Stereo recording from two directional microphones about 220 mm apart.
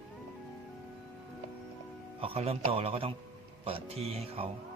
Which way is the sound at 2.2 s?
25° right (ahead or behind).